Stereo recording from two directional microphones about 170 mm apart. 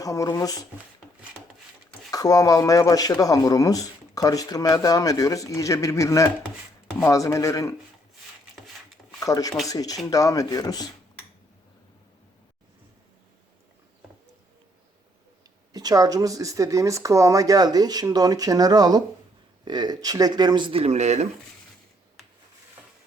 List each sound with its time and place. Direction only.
0.0 s speech: 20° left (ahead or behind)
2.0 s speech: 20° left (ahead or behind)
9.2 s speech: 20° left (ahead or behind)
15.7 s speech: 20° right (ahead or behind); by 21.2 s 40° right (ahead or behind)